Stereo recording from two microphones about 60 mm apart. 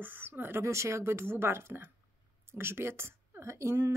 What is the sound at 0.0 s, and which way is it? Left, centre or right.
Speech, right.